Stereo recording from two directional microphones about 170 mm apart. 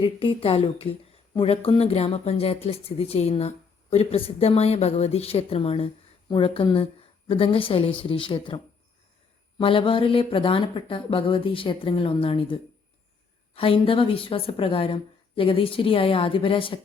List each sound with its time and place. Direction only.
0.0 s speech: 30° left (ahead or behind)